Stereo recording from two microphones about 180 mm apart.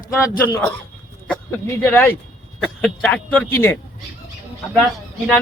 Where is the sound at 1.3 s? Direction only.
10° left (ahead or behind).